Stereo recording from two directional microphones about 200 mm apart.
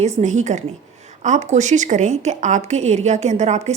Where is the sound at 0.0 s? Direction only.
35° right (ahead or behind).